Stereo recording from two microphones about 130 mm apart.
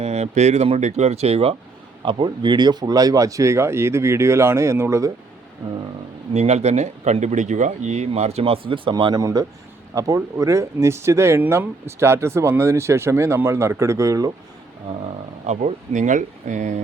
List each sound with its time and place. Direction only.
0.0 s speech: 55° right (ahead or behind)
2.0 s speech: 35° right (ahead or behind)
6.3 s speech: 55° right (ahead or behind); by 14.3 s 25° right (ahead or behind)
15.4 s speech: 65° right (ahead or behind)